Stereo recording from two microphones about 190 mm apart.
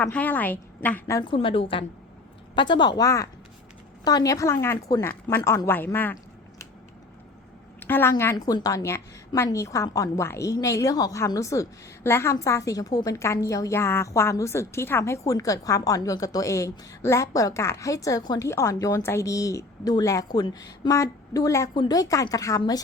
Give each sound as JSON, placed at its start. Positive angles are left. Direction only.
{"t": 0.0, "sound": "a woman's voice", "side_deg": 10}
{"t": 1.2, "sound": "a woman's voice", "side_deg": 25}
{"t": 7.8, "sound": "a sound", "side_deg": 10}
{"t": 8.1, "sound": "a woman's voice", "side_deg": 15}